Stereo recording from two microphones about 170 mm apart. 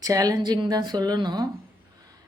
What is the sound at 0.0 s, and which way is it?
A woman's voice, 20° right (ahead or behind).